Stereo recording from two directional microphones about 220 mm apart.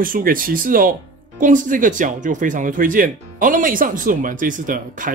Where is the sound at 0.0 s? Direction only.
40° right (ahead or behind).